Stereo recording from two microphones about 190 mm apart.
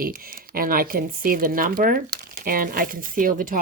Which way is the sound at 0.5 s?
50° right (ahead or behind).